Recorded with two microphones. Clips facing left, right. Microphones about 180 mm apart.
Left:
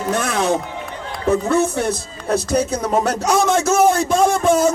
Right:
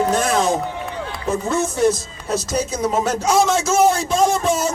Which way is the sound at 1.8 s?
60° left (ahead or behind).